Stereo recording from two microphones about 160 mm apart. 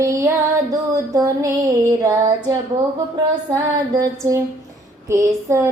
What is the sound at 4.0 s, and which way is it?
Female singing, 20° right (ahead or behind).